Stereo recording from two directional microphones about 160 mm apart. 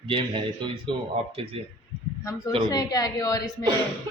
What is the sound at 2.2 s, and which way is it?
A woman's voice, 20° left (ahead or behind).